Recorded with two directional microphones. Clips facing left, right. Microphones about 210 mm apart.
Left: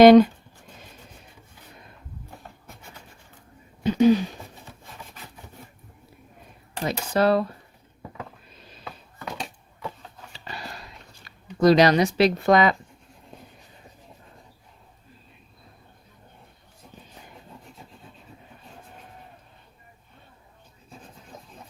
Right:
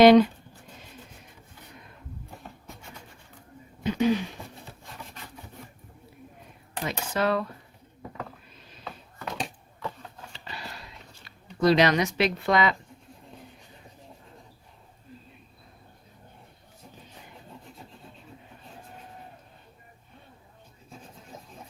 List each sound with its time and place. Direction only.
0.0 s speech: 45° left (ahead or behind)
3.8 s speech: 35° left (ahead or behind)
6.8 s speech: 35° left (ahead or behind)
11.6 s speech: 40° left (ahead or behind)